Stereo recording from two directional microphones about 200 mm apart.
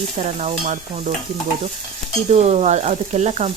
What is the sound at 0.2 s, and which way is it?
Speech, 35° right (ahead or behind).